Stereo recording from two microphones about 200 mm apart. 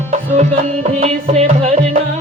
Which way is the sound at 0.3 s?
35° right (ahead or behind).